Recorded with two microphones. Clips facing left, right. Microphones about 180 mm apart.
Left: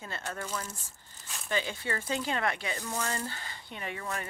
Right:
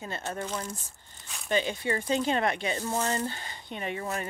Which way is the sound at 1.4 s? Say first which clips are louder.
Right 5 dB; 20° right (ahead or behind).